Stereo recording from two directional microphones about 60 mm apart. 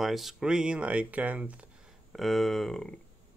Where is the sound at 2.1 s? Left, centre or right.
Centre.